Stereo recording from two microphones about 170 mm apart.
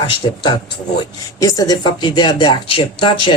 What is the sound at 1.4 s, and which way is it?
Speech, 20° left (ahead or behind).